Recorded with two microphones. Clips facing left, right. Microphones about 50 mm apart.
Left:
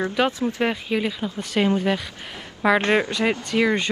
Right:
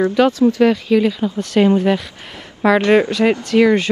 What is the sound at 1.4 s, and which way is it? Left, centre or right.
Speech, centre.